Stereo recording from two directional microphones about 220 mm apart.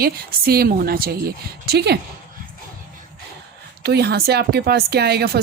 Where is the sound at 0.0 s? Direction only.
45° right (ahead or behind).